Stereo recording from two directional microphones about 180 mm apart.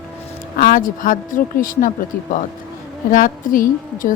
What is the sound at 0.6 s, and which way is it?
Speech, 50° left (ahead or behind).